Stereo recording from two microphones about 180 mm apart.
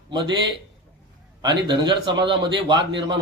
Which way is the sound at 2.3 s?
25° right (ahead or behind).